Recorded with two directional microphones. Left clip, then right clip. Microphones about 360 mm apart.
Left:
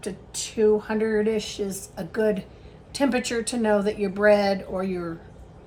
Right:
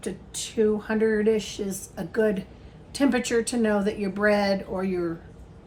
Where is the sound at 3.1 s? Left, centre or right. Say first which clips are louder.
Right 4 dB; left.